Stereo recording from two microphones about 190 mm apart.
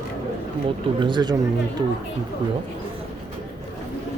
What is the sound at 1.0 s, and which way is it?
Speech, 25° right (ahead or behind).